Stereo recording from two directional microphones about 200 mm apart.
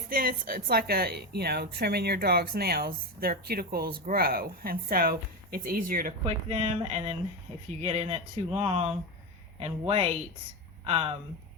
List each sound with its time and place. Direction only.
0.1 s a woman's voice: 45° right (ahead or behind)
6.2 s speech: 35° right (ahead or behind)